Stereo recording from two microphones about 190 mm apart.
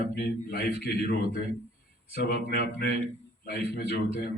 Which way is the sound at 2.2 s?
60° left (ahead or behind).